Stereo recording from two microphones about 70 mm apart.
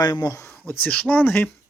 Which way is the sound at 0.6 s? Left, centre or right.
Left.